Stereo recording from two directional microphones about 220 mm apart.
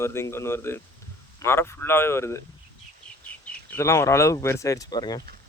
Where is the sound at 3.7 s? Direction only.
10° left (ahead or behind).